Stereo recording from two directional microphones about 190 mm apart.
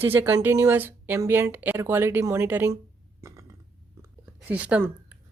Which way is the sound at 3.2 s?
15° right (ahead or behind).